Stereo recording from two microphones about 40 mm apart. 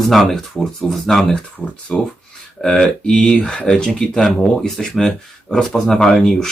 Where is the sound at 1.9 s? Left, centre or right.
Left.